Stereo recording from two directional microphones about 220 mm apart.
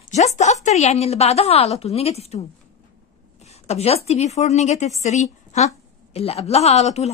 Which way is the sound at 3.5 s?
30° left (ahead or behind).